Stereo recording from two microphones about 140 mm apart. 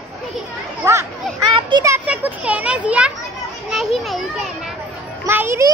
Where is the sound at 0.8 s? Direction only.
20° right (ahead or behind).